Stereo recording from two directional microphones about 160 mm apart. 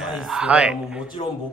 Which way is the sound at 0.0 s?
Centre (ahead or behind).